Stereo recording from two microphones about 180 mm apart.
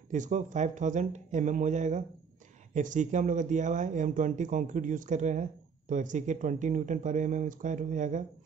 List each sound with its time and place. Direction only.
0.1 s speech: 45° right (ahead or behind)